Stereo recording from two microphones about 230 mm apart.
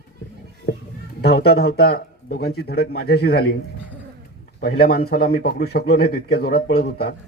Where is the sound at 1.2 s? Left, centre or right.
Left.